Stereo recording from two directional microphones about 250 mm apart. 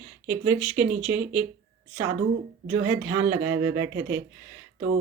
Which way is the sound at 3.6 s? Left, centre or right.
Right.